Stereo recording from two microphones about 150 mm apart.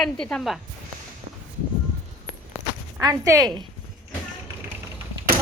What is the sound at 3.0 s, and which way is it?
Speech, 20° right (ahead or behind).